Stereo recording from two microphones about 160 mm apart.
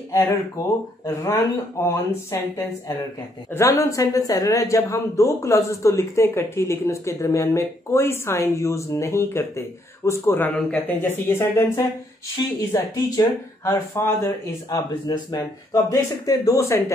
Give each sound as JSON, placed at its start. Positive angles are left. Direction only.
{"t": 1.0, "sound": "speech", "side_deg": 20}
{"t": 14.7, "sound": "speech", "side_deg": 30}